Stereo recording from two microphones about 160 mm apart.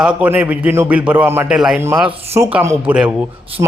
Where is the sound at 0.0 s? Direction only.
10° right (ahead or behind).